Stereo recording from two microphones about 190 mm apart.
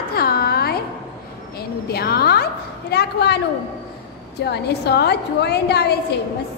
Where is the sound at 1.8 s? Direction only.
55° left (ahead or behind).